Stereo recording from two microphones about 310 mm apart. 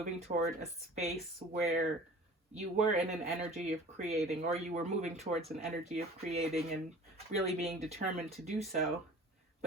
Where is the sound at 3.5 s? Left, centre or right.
Right.